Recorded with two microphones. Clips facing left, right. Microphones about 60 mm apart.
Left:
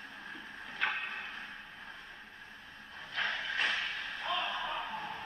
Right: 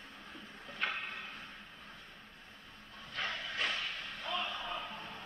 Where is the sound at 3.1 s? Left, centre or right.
Left.